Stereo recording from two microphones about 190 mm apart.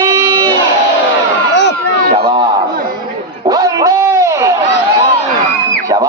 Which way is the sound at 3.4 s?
20° right (ahead or behind).